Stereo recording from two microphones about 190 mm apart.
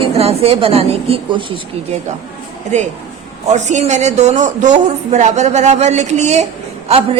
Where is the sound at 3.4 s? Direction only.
40° right (ahead or behind).